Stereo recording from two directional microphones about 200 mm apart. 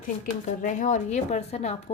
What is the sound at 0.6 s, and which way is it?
Speech, 40° left (ahead or behind).